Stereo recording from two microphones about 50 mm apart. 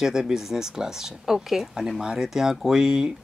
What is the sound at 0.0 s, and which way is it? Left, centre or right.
Speech, centre.